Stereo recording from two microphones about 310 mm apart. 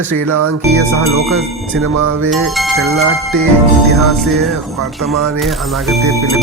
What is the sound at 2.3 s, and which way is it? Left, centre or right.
Speech, centre.